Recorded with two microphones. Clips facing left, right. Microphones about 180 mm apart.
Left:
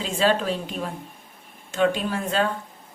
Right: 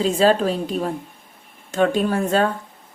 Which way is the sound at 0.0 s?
40° right (ahead or behind).